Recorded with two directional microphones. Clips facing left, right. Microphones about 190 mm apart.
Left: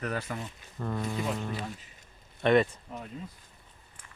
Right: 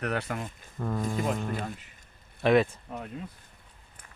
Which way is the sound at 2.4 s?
Centre (ahead or behind).